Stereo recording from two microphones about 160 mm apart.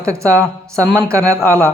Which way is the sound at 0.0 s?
20° right (ahead or behind).